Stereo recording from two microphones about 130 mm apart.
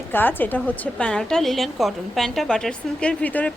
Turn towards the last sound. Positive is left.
turn(degrees=10)  # may be behind; listen again after turning